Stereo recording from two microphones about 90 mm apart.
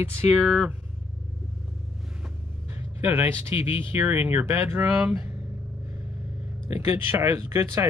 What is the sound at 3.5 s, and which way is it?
Speech, 90° left.